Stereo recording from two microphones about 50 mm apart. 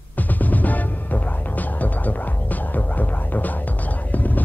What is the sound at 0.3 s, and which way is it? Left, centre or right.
Music, left.